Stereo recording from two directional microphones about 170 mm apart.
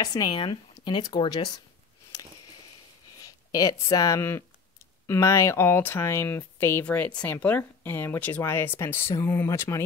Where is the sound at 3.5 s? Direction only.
20° left (ahead or behind).